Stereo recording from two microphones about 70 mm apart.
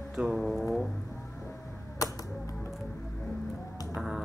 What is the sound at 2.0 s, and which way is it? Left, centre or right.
Typewriter, left.